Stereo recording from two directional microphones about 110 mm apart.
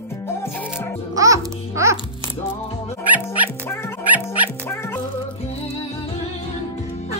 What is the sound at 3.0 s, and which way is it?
Music, 15° right (ahead or behind).